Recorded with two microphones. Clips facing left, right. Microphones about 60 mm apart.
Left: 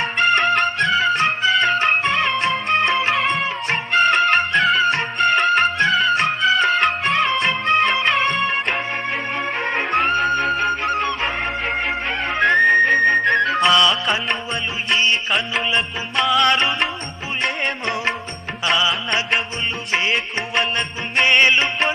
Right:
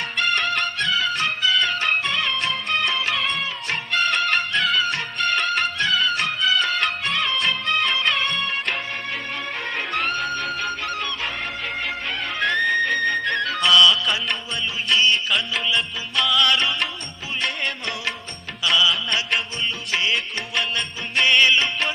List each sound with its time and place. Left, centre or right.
0.0 s music: left
3.2 s music: left
3.4 s music: left
7.3 s music of bollywood: left
9.6 s music: left
12.5 s music: left
20.1 s music: left